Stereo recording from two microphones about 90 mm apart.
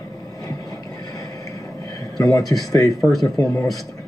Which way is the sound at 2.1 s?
40° left (ahead or behind).